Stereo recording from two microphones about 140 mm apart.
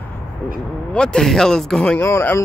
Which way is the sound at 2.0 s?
20° left (ahead or behind).